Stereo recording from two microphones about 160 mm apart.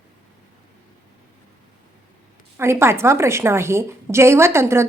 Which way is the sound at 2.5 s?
15° right (ahead or behind).